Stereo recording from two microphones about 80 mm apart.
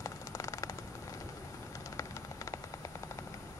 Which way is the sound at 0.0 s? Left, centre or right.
Left.